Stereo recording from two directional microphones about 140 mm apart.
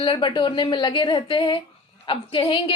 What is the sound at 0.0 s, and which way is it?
A woman's voice, 35° left (ahead or behind).